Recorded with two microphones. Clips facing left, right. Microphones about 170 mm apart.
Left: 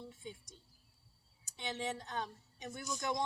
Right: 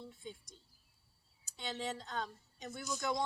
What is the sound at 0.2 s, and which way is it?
A woman's voice, 20° left (ahead or behind).